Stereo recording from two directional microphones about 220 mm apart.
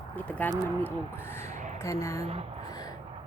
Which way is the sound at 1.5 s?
35° right (ahead or behind).